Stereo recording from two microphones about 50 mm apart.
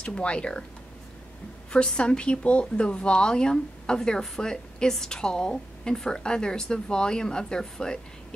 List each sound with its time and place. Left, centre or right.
0.0 s speech: left
2.0 s a woman's voice: left